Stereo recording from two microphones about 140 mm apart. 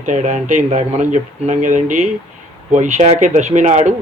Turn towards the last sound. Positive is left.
turn(degrees=-60)  # may be behind; listen again after turning